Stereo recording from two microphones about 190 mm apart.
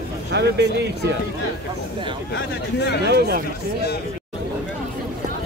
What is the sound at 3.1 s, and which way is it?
Speech, 55° right (ahead or behind).